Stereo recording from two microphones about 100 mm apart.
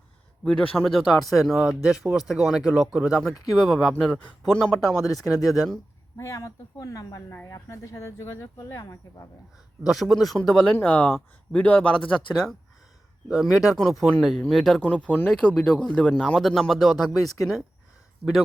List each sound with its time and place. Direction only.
0.4 s speech: 10° left (ahead or behind)
0.9 s speech: centre (ahead or behind)
6.1 s speech: 30° left (ahead or behind)
7.3 s speech: 20° left (ahead or behind)
9.8 s speech: centre (ahead or behind)
10.7 s speech: 10° left (ahead or behind)
13.2 s speech: 5° right (ahead or behind)